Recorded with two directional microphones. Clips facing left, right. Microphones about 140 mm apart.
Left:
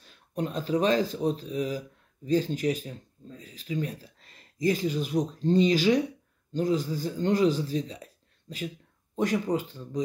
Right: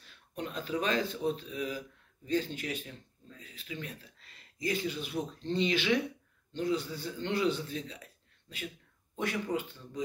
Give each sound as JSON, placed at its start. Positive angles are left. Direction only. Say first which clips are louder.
{"t": 0.0, "sound": "a man's voice", "louder": "left 8 dB", "side_deg": 40}